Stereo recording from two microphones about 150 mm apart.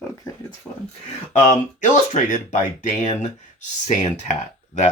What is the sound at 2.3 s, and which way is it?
Speech, 60° left (ahead or behind).